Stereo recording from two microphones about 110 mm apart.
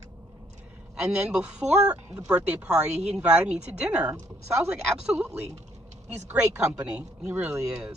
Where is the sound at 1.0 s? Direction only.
10° right (ahead or behind).